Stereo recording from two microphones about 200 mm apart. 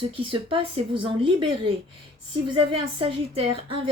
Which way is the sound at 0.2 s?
25° right (ahead or behind).